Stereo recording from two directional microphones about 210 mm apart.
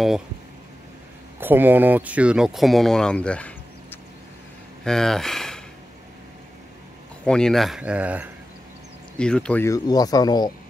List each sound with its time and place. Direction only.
1.4 s speech: 10° right (ahead or behind)
7.2 s speech: 5° left (ahead or behind)
9.2 s speech: 5° left (ahead or behind)